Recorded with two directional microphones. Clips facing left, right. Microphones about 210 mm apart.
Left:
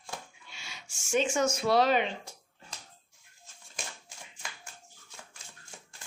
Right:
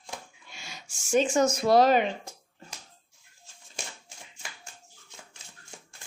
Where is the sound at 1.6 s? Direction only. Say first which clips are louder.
Right 4 dB; 45° right (ahead or behind).